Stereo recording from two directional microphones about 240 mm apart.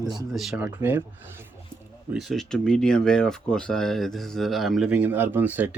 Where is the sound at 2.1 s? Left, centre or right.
Centre.